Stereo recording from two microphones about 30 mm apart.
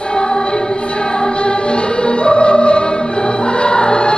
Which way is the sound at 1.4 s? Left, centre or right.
Left.